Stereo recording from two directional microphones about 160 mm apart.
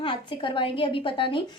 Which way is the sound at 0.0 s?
30° left (ahead or behind).